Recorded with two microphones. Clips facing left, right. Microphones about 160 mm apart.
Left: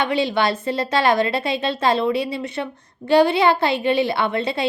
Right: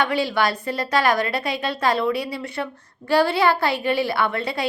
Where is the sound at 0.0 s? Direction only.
20° left (ahead or behind).